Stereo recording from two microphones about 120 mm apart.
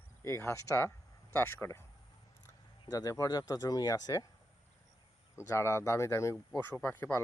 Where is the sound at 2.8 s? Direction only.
30° left (ahead or behind).